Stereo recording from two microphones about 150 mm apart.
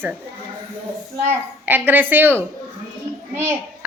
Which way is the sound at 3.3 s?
15° right (ahead or behind).